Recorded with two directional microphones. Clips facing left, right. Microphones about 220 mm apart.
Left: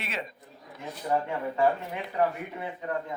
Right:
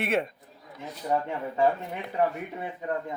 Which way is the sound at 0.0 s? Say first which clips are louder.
Right 10 dB; 55° right (ahead or behind).